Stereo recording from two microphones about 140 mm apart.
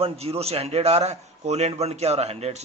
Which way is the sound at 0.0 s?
45° right (ahead or behind).